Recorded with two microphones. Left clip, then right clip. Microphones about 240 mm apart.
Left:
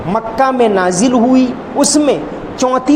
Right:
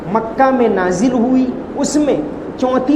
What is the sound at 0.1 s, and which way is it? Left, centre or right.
A man's voice, left.